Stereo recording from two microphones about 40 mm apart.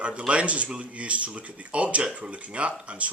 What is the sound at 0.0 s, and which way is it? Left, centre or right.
A man's voice, right.